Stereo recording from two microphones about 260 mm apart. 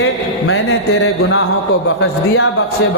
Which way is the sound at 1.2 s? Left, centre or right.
Left.